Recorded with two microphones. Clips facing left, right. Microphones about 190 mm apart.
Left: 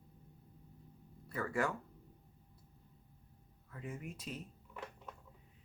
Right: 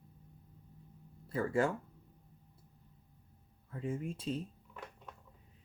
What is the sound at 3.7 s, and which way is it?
Speech, 30° right (ahead or behind).